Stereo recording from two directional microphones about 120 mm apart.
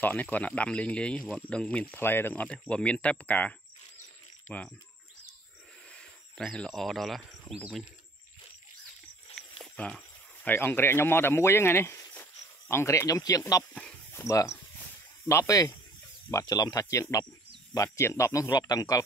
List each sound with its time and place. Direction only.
0.0 s speech: 15° left (ahead or behind)
5.9 s a sound: 10° left (ahead or behind)
7.4 s speech: centre (ahead or behind)
9.3 s speech: 5° left (ahead or behind); by 12.1 s 20° left (ahead or behind)
12.1 s cricket: 20° left (ahead or behind)
14.1 s snake: 25° left (ahead or behind)
16.3 s speech: 30° left (ahead or behind)